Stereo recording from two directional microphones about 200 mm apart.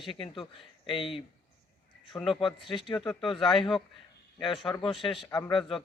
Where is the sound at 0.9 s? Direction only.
Centre (ahead or behind).